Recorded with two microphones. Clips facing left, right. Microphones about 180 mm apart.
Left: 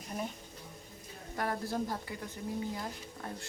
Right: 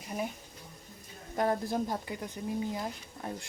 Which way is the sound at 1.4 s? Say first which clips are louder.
Right 5 dB; 20° right (ahead or behind).